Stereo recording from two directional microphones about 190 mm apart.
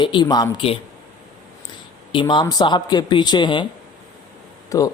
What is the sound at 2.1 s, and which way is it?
A man's voice, 25° left (ahead or behind).